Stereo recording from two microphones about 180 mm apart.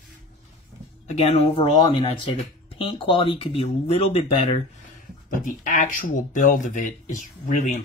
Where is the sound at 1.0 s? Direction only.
40° left (ahead or behind).